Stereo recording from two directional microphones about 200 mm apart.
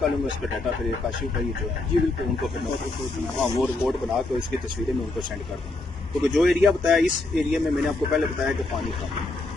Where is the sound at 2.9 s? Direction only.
Centre (ahead or behind).